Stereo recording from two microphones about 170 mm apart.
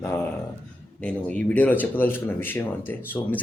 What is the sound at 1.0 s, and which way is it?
Speech, 5° left (ahead or behind).